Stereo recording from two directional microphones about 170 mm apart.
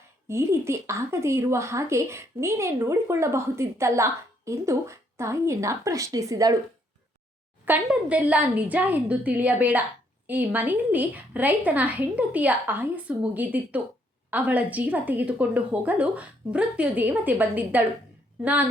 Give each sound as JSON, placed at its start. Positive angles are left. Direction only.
{"t": 0.3, "sound": "speech", "side_deg": -15}
{"t": 7.6, "sound": "speech", "side_deg": -10}